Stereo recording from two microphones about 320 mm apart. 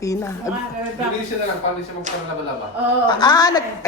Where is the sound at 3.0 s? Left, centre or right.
Centre.